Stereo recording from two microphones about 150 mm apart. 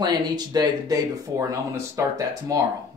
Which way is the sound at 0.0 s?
25° right (ahead or behind).